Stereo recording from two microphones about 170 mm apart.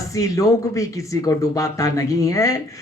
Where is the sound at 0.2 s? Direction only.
20° left (ahead or behind).